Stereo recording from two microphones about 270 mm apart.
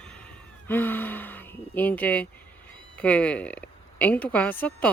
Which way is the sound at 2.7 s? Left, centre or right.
Centre.